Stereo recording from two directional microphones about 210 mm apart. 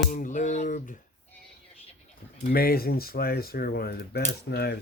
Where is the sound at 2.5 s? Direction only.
45° left (ahead or behind).